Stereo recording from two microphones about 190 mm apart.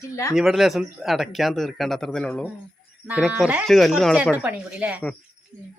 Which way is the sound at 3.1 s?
5° right (ahead or behind).